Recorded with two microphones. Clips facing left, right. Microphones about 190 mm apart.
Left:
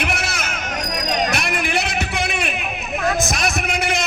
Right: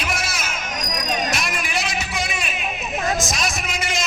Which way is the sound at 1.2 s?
60° left (ahead or behind).